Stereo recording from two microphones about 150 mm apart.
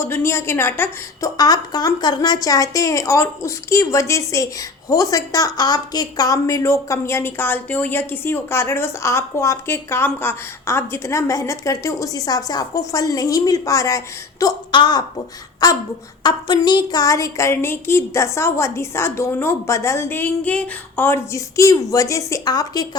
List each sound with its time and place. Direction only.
0.0 s a woman's voice: 15° left (ahead or behind)
1.4 s speech: 25° left (ahead or behind)